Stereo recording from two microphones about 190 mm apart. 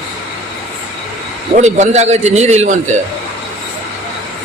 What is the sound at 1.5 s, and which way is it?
A man's voice, 35° right (ahead or behind).